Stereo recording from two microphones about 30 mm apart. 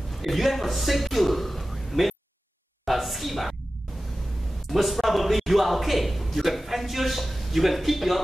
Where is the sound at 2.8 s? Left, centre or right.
Centre.